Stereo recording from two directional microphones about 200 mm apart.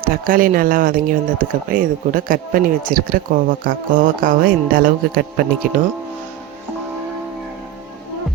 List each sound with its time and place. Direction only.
0.0 s speech: 45° right (ahead or behind)